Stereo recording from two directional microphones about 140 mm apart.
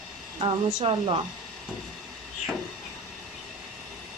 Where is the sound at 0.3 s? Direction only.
40° right (ahead or behind).